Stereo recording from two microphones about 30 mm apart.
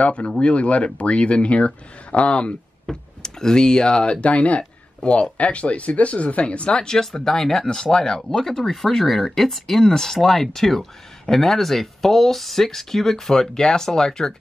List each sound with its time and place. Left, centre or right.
0.0 s speech: left
2.9 s speech: left
4.2 s speech: left
6.8 s speech: left